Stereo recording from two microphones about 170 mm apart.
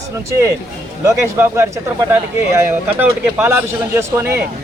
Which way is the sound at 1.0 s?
15° right (ahead or behind).